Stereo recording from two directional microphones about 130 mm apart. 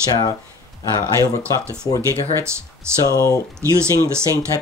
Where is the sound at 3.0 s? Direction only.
25° left (ahead or behind).